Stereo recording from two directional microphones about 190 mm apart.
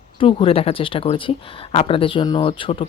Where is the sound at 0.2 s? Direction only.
30° left (ahead or behind).